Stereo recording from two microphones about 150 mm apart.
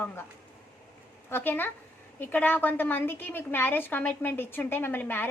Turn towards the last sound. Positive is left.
turn(degrees=15)  # may be behind; listen again after turning